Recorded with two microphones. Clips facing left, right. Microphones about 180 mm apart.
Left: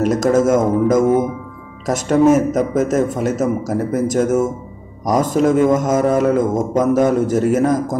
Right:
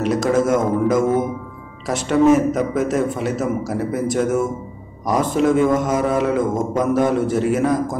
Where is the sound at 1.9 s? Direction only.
45° left (ahead or behind).